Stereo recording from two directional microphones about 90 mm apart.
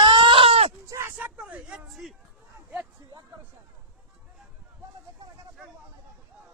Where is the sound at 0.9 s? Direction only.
30° right (ahead or behind).